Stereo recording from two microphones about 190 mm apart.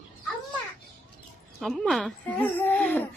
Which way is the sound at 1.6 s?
Centre (ahead or behind).